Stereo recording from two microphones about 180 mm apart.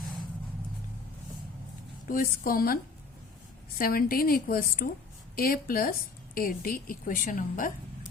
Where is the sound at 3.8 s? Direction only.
55° left (ahead or behind).